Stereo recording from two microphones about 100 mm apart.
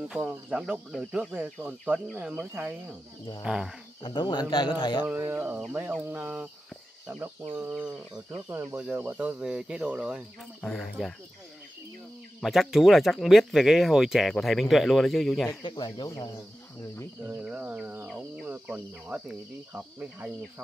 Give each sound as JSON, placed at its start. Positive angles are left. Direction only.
{"t": 0.1, "sound": "speech", "side_deg": -10}
{"t": 4.0, "sound": "speech", "side_deg": 50}
{"t": 5.0, "sound": "speech", "side_deg": -25}
{"t": 8.7, "sound": "speech", "side_deg": -20}
{"t": 10.6, "sound": "speech", "side_deg": 0}
{"t": 12.4, "sound": "speech", "side_deg": 0}
{"t": 15.6, "sound": "speech", "side_deg": 45}
{"t": 17.3, "sound": "speech", "side_deg": -15}
{"t": 19.7, "sound": "speech", "side_deg": -20}